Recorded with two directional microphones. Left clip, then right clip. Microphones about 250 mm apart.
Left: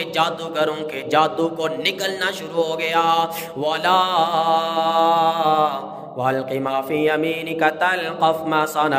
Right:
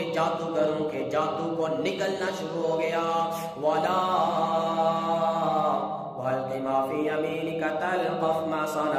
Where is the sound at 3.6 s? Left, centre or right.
Left.